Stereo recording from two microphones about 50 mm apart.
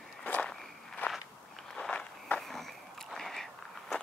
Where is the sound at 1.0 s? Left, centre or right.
Left.